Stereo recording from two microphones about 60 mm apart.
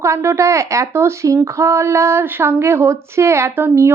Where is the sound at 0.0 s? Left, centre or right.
Right.